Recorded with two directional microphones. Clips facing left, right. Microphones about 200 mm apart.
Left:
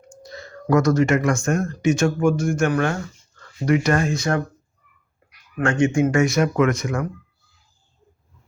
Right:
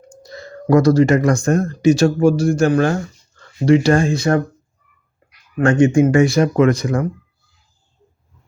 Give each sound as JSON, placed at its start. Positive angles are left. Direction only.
{"t": 0.7, "sound": "speech", "side_deg": -30}
{"t": 5.5, "sound": "speech", "side_deg": -35}